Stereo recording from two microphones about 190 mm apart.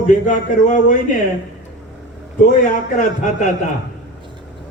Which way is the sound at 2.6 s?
45° left (ahead or behind).